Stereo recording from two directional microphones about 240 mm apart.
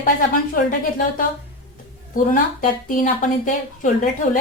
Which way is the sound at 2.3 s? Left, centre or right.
Left.